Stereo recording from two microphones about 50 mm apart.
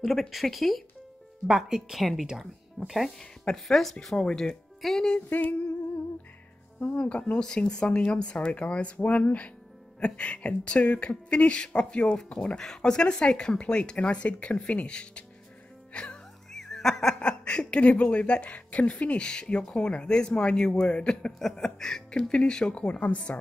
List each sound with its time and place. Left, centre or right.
0.0 s speech: centre
5.3 s humming: left
7.0 s speech: left
15.9 s music: left
16.5 s speech: centre; by 23.3 s left